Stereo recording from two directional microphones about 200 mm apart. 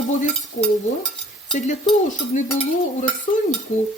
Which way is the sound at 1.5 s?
35° left (ahead or behind).